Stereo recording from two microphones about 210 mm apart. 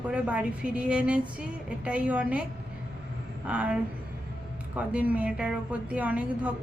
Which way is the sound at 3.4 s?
5° right (ahead or behind).